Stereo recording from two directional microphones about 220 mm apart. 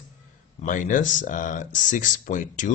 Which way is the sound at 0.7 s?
35° left (ahead or behind).